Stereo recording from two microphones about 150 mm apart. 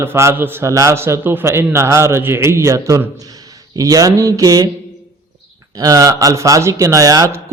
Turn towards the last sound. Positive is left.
turn(degrees=-25)  # may be behind; listen again after turning